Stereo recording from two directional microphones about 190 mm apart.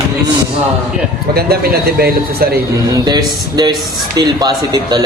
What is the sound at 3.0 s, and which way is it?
Speech, 20° right (ahead or behind).